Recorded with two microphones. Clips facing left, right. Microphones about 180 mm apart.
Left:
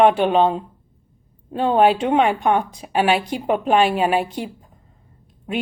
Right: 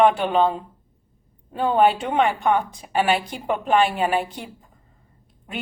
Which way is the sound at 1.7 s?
60° left (ahead or behind).